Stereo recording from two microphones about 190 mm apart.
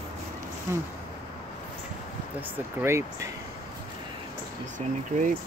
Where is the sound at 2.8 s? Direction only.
15° right (ahead or behind).